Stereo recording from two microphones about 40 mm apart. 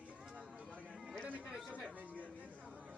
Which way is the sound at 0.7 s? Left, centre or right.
Right.